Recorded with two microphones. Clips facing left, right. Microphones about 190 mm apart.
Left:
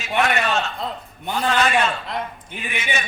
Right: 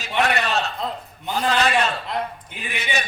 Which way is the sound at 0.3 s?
35° right (ahead or behind).